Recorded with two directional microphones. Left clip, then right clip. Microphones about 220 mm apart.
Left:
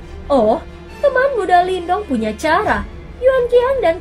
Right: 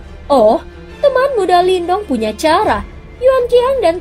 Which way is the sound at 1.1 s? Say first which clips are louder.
Right 1 dB; 30° right (ahead or behind).